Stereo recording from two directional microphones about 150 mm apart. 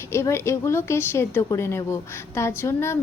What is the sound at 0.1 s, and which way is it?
A woman's voice, 20° left (ahead or behind).